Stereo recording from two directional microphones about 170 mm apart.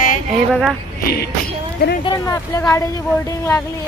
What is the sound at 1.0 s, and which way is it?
Music, 70° left (ahead or behind).